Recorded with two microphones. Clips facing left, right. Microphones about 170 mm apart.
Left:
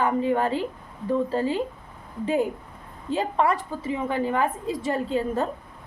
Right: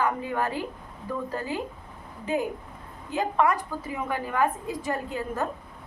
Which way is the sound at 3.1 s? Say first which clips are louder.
Left 1 dB; 30° left (ahead or behind).